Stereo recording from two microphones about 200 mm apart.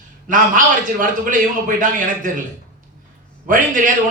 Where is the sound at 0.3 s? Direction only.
40° right (ahead or behind).